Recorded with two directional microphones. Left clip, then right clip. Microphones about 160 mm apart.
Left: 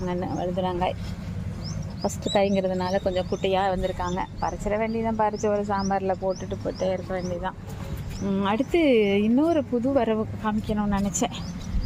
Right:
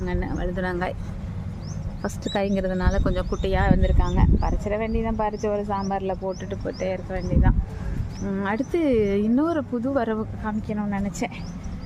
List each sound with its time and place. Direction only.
0.0 s speech: 10° right (ahead or behind)
2.3 s speech: 10° right (ahead or behind)
6.2 s speech: 15° right (ahead or behind)
8.2 s speech: 5° right (ahead or behind)